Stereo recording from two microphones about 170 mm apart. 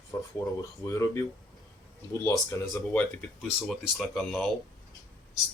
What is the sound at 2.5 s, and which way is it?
Speech, 10° left (ahead or behind).